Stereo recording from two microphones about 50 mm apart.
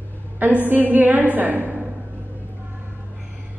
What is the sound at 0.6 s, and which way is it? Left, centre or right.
A woman's voice, right.